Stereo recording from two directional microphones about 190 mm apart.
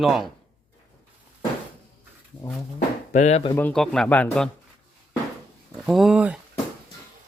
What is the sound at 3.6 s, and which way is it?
Speech, 5° left (ahead or behind).